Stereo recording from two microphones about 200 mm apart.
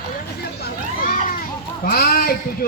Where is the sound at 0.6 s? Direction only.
45° left (ahead or behind).